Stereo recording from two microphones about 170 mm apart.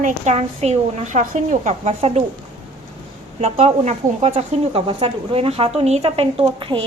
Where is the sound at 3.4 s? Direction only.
35° right (ahead or behind).